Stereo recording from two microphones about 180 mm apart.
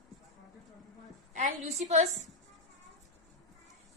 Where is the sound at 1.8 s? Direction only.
40° right (ahead or behind).